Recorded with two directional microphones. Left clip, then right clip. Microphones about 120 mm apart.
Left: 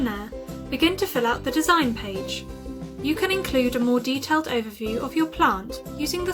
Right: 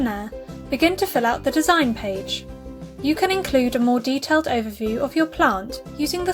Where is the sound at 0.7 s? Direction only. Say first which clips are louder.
Right 3 dB; 45° right (ahead or behind).